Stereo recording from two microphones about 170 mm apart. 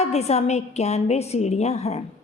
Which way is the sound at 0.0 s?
40° left (ahead or behind).